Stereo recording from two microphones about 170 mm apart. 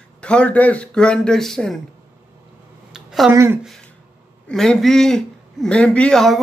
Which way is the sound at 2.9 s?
Centre (ahead or behind).